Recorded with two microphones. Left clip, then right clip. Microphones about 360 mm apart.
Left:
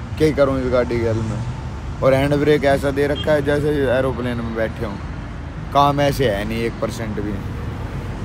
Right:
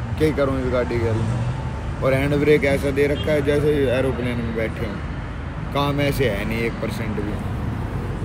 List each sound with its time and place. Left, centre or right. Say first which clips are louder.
0.2 s speech: left 4 dB; centre
2.0 s speech: left 3 dB; centre
5.9 s speech: left 4 dB; centre